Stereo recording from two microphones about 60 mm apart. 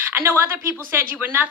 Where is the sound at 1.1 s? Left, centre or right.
Right.